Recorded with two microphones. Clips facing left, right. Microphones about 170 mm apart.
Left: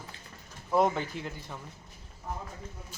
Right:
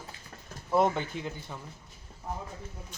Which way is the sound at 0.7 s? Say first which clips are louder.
Even; centre (ahead or behind).